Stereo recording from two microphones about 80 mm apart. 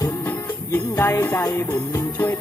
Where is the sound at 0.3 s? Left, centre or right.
Left.